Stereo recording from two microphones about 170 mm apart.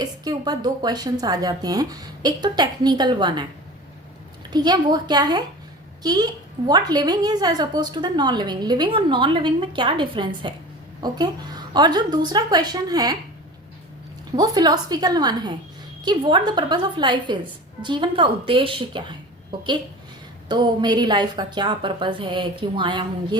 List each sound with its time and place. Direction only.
0.0 s a woman's voice: 25° right (ahead or behind)
4.5 s a woman's voice: 25° right (ahead or behind)
14.3 s a woman's voice: 25° right (ahead or behind)